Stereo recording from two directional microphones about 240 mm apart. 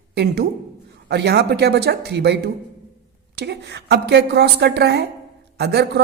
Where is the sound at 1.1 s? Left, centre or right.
Right.